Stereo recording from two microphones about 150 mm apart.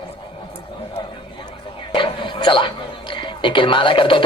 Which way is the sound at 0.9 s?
30° left (ahead or behind).